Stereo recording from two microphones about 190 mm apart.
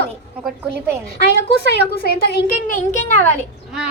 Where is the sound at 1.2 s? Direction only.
60° left (ahead or behind); by 3.2 s 40° left (ahead or behind).